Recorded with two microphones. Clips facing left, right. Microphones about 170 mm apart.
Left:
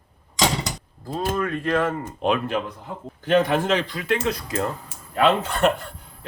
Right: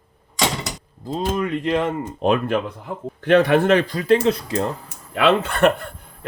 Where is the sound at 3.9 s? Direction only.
35° right (ahead or behind).